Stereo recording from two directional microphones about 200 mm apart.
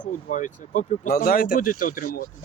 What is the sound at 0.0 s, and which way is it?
Speech, 40° left (ahead or behind).